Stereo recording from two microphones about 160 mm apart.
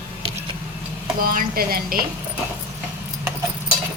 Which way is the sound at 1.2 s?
65° right (ahead or behind).